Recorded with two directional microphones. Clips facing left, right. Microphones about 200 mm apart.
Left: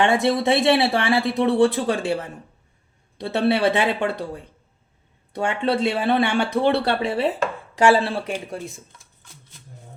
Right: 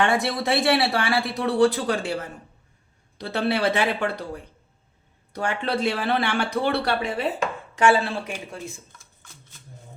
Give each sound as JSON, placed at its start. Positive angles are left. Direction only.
{"t": 0.0, "sound": "speech", "side_deg": 25}
{"t": 3.2, "sound": "speech", "side_deg": 25}